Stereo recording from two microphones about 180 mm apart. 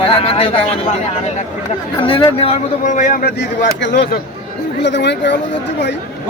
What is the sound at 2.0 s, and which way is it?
A man's voice, 30° left (ahead or behind).